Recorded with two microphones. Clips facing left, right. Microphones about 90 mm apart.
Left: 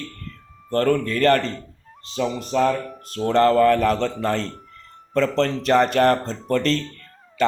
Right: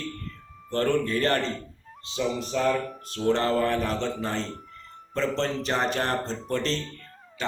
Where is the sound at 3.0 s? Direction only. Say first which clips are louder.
Left 8 dB; 45° left (ahead or behind).